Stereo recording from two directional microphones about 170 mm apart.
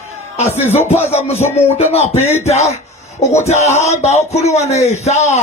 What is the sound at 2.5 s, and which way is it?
Music, 40° left (ahead or behind).